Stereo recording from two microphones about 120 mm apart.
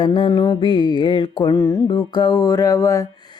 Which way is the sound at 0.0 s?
45° left (ahead or behind).